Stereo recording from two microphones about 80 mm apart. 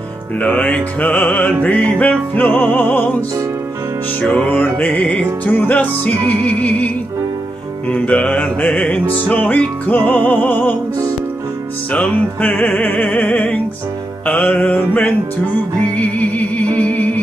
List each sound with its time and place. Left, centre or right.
0.4 s music: centre
7.9 s music: centre
11.9 s music: centre